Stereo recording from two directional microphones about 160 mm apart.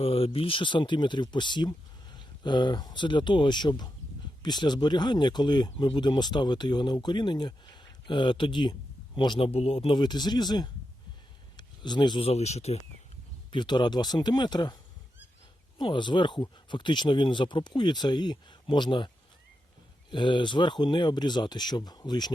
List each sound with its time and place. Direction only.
0.0 s speech: 35° left (ahead or behind)
13.5 s speech: 30° left (ahead or behind)
15.8 s speech: 30° left (ahead or behind)